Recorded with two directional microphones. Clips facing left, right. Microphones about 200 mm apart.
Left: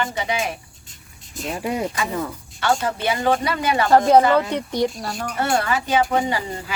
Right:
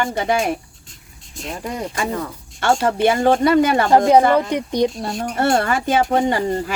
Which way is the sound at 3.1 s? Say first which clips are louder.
Right 6 dB; 50° right (ahead or behind).